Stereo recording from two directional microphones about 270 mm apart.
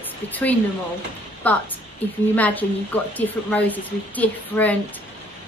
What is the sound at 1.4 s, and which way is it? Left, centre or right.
A woman's voice, centre.